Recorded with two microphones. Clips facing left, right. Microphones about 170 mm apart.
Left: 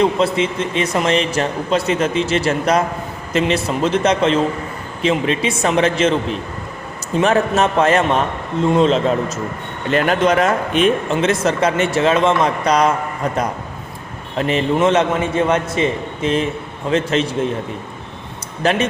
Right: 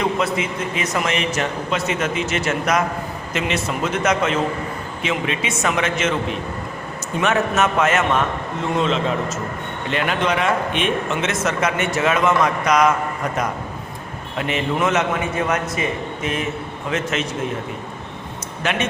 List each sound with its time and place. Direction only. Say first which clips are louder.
0.0 s speech: left 5 dB; 30° left (ahead or behind)
7.2 s speech: left 4 dB; 30° left (ahead or behind)
14.3 s a man's voice: left 5 dB; 35° left (ahead or behind)
18.6 s speech: left 6 dB; 35° left (ahead or behind)